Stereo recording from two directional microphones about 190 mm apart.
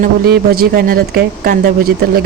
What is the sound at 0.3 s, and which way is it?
Speech, 55° right (ahead or behind).